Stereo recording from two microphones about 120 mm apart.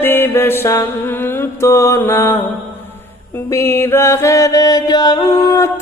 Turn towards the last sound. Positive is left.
turn(degrees=25)  # may be behind; listen again after turning